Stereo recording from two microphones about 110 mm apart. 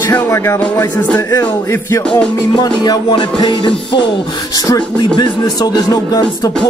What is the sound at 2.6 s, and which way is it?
Music, 40° left (ahead or behind).